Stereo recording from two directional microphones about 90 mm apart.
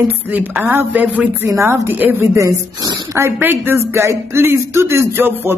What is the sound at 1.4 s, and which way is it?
Speech, 35° right (ahead or behind).